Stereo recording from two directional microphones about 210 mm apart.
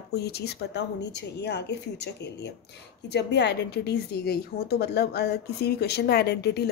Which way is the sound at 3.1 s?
50° left (ahead or behind).